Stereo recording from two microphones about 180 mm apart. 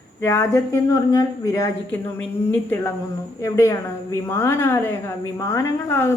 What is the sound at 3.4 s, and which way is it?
A woman's voice, 15° left (ahead or behind).